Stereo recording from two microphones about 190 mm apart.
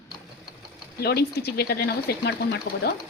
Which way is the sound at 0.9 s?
55° left (ahead or behind).